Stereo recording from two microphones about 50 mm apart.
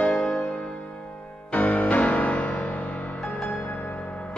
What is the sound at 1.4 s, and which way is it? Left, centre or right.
Music, left.